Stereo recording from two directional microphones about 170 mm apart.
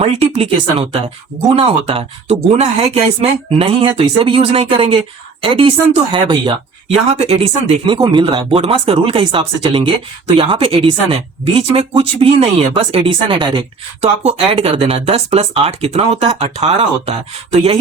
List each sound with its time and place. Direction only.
0.0 s speech: 35° right (ahead or behind)
7.9 s speech: 25° right (ahead or behind)